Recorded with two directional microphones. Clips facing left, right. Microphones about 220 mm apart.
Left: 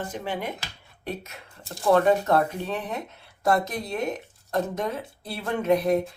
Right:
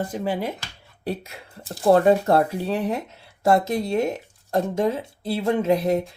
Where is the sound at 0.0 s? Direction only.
40° right (ahead or behind).